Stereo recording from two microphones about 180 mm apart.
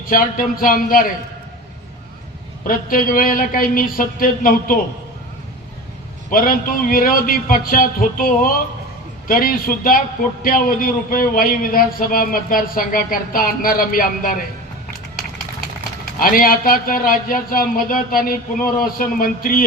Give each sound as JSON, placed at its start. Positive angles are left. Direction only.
{"t": 0.0, "sound": "a man's voice", "side_deg": 50}
{"t": 2.6, "sound": "a man's voice", "side_deg": 50}
{"t": 6.3, "sound": "a man's voice", "side_deg": 50}
{"t": 16.2, "sound": "a man's voice", "side_deg": 50}